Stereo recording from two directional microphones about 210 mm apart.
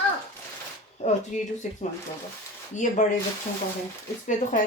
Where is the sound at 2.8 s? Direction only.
35° left (ahead or behind).